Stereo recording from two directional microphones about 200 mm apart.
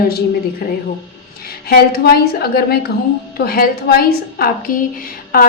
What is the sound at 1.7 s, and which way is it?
A woman's voice, 50° left (ahead or behind).